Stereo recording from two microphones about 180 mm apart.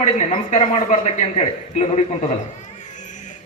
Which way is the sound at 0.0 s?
35° left (ahead or behind).